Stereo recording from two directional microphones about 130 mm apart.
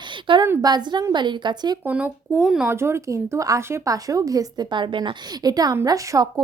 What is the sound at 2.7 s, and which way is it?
Speech, 20° right (ahead or behind).